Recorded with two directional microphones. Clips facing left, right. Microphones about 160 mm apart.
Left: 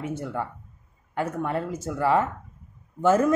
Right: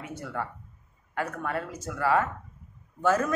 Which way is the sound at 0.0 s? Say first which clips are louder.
Left 5 dB; 25° left (ahead or behind).